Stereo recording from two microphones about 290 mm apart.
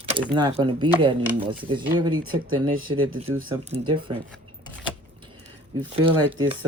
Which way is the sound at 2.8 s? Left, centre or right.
Right.